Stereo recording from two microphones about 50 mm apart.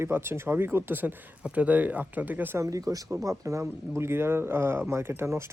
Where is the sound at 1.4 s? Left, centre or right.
Right.